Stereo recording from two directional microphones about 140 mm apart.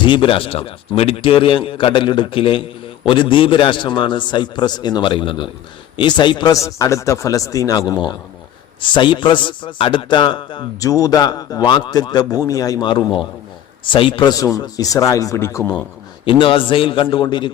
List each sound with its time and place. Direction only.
0.0 s a man's voice: 35° left (ahead or behind)
10.8 s a man's voice: 25° left (ahead or behind)
16.2 s speech: 40° left (ahead or behind)